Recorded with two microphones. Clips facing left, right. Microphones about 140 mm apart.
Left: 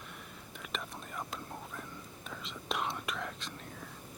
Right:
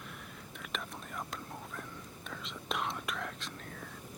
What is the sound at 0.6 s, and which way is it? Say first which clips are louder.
Whispering: even; centre (ahead or behind).